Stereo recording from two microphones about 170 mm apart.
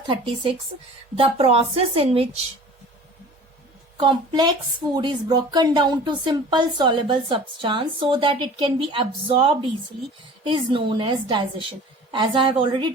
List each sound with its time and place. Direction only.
1.1 s a woman's voice: 35° right (ahead or behind)
3.9 s speech: 25° right (ahead or behind)